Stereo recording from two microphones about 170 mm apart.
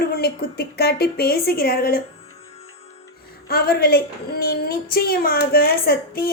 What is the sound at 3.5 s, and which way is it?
A woman's voice, 65° left (ahead or behind).